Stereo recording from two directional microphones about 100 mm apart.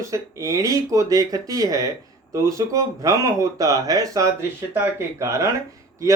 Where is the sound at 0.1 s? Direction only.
35° right (ahead or behind).